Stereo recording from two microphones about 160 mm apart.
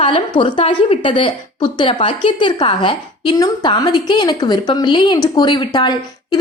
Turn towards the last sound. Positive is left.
turn(degrees=30)  # may be behind; listen again after turning